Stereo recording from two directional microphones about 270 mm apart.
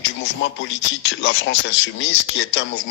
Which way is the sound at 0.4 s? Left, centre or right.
Left.